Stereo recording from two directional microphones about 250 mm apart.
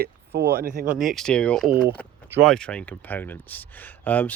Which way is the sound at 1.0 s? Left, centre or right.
Centre.